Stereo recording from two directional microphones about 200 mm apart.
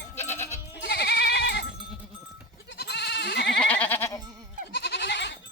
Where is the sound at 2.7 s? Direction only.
55° left (ahead or behind).